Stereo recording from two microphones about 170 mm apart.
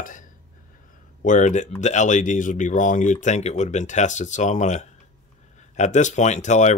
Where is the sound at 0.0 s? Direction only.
50° left (ahead or behind).